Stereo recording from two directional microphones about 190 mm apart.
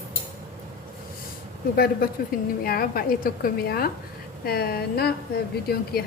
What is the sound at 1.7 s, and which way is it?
A woman's voice, 55° left (ahead or behind).